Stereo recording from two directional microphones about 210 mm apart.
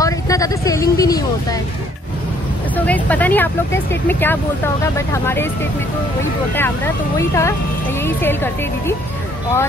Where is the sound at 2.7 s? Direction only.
5° left (ahead or behind).